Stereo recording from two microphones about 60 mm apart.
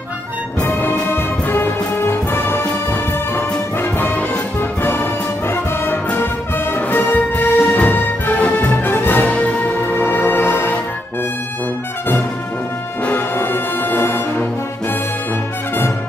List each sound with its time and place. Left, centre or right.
0.7 s orchestra: left
1.0 s music: left
6.1 s music: left
9.3 s music: left
13.4 s music: left